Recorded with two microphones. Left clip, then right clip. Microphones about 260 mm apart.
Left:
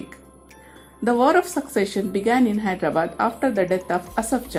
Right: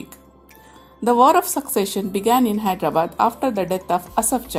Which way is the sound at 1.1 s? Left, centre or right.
Right.